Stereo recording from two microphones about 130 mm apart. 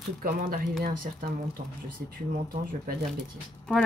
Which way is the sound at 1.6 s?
85° right.